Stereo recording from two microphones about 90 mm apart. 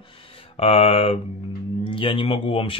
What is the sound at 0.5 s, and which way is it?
Speech, 90° left.